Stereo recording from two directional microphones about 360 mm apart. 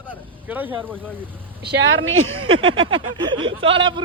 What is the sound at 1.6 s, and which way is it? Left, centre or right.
Speech, right.